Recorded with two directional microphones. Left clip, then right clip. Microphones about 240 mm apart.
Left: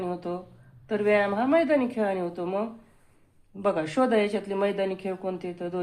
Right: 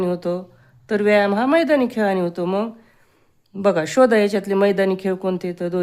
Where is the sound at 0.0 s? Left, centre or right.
Right.